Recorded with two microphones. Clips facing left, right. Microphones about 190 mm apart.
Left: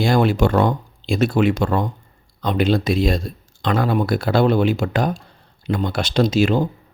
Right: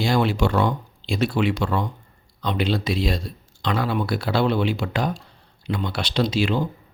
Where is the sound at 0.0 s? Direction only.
50° left (ahead or behind).